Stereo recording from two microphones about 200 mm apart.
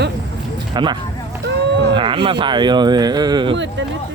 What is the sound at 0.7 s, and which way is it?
Speech, 20° right (ahead or behind).